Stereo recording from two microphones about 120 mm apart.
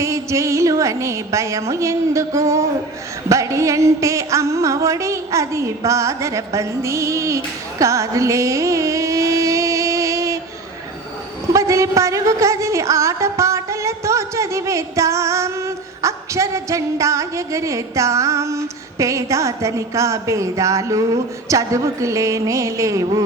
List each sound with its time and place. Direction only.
0.0 s a woman's voice: 25° right (ahead or behind)
11.5 s a woman's voice: 25° right (ahead or behind)